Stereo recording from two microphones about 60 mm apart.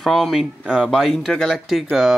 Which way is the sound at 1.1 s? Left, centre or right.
Centre.